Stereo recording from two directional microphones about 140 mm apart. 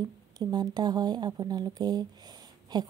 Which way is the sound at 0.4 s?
30° right (ahead or behind).